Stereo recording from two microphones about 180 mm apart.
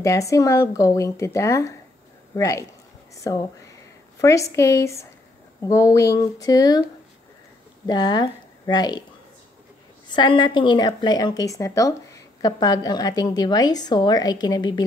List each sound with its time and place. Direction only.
0.0 s speech: 15° left (ahead or behind)
7.8 s speech: 20° left (ahead or behind)
10.0 s speech: 25° left (ahead or behind)